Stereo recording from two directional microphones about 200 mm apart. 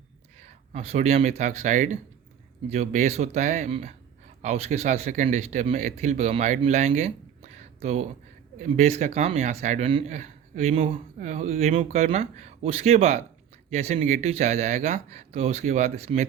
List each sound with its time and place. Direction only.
0.7 s speech: 30° right (ahead or behind)